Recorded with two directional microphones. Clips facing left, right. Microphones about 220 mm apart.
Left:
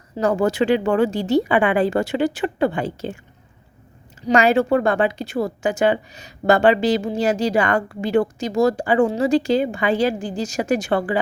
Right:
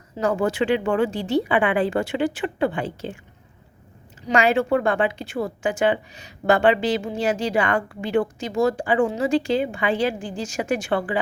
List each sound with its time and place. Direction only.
0.2 s a woman's voice: 40° left (ahead or behind)
4.3 s a woman's voice: 40° left (ahead or behind)